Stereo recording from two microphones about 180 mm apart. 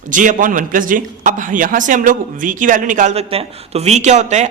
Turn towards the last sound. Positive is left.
turn(degrees=-40)  # may be behind; listen again after turning